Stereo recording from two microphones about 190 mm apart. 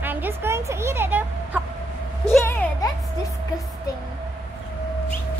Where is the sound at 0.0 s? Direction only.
10° right (ahead or behind).